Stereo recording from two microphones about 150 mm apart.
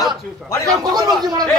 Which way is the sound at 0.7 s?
25° right (ahead or behind).